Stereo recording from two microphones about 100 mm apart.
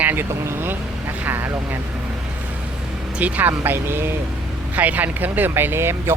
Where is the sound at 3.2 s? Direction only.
15° right (ahead or behind).